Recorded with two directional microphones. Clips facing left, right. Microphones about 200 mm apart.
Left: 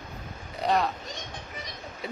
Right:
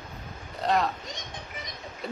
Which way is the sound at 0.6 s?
Centre (ahead or behind).